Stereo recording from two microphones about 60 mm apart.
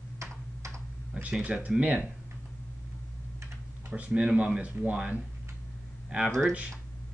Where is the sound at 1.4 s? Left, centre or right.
Right.